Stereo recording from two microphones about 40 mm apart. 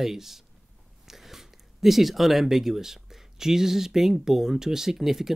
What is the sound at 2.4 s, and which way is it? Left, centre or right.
Speech, centre.